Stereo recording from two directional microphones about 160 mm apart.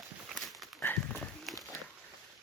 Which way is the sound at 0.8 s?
10° left (ahead or behind).